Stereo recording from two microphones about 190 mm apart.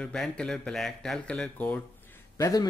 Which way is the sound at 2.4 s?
20° left (ahead or behind).